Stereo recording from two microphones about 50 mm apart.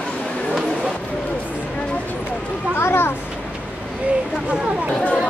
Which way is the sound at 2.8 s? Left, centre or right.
Left.